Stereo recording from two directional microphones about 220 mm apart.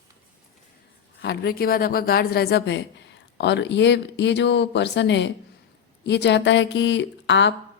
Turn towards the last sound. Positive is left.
turn(degrees=55)  # may be behind; listen again after turning